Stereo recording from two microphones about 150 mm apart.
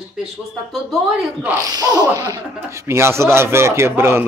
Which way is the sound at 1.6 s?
25° right (ahead or behind).